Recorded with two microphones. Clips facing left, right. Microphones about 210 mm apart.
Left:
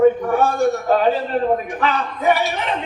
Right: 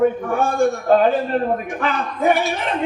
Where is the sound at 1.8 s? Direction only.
50° right (ahead or behind).